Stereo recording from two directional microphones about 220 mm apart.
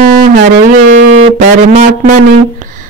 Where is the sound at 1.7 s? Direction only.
30° right (ahead or behind).